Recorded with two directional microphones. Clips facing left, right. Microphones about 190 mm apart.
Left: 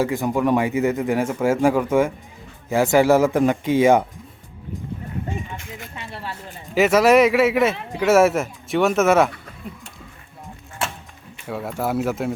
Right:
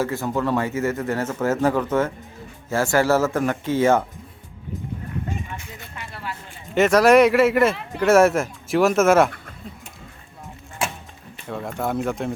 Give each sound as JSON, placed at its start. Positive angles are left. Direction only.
{"t": 0.0, "sound": "a man's voice", "side_deg": 15}
{"t": 6.0, "sound": "a sound", "side_deg": 30}
{"t": 6.7, "sound": "speech", "side_deg": 5}
{"t": 11.4, "sound": "speech", "side_deg": 5}